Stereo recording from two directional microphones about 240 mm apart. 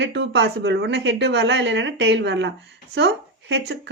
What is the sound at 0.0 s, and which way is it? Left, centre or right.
Speech, right.